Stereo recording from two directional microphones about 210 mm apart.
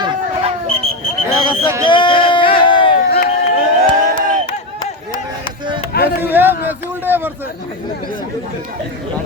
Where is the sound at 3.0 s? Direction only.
45° left (ahead or behind).